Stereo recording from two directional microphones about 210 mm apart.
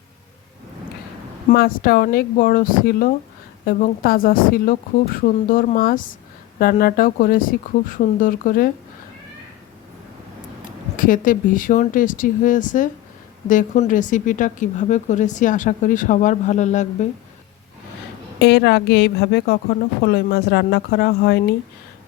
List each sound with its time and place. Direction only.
1.5 s speech: 45° left (ahead or behind)
10.9 s speech: 40° left (ahead or behind)
18.3 s speech: 50° left (ahead or behind)